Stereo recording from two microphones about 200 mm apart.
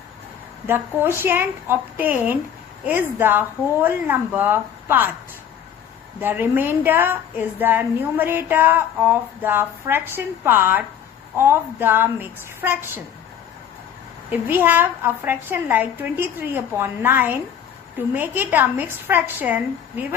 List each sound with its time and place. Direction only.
0.7 s a woman's voice: 10° right (ahead or behind)
6.1 s a woman's voice: 10° right (ahead or behind)
14.3 s a woman's voice: 10° right (ahead or behind)